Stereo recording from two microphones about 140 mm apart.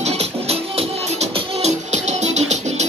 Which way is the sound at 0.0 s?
45° right (ahead or behind).